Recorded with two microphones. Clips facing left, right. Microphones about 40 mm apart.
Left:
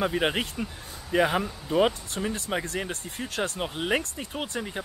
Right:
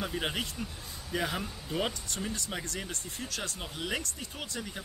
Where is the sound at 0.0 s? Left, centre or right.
Left.